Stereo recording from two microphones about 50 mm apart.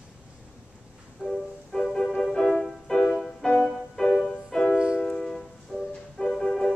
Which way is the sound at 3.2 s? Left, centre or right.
Centre.